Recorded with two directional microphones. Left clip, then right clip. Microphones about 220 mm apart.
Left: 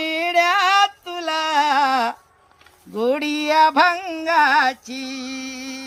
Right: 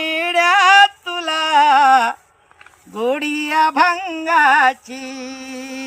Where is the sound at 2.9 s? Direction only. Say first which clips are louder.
Right 1 dB; 10° left (ahead or behind).